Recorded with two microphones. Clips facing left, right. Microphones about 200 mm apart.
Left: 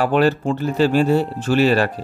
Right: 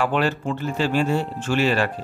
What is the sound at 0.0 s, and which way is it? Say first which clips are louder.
A man's voice: left 5 dB; 40° left (ahead or behind).